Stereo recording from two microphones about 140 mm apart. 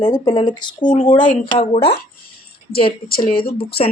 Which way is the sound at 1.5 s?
45° left (ahead or behind).